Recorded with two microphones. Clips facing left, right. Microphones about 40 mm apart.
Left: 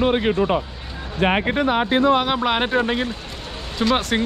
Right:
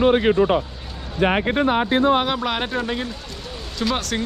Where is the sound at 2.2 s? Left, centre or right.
Centre.